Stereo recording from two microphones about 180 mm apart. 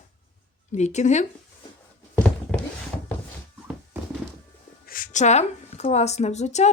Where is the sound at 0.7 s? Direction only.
40° left (ahead or behind).